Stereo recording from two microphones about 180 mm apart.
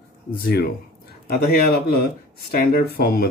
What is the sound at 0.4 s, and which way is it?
Speech, 60° left (ahead or behind).